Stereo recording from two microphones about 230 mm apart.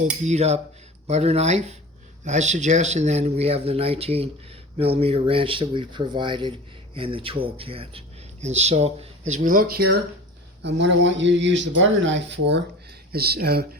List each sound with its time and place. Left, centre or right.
0.3 s speech: right